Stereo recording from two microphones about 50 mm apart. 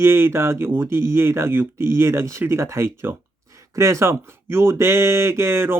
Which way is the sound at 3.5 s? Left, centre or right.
Right.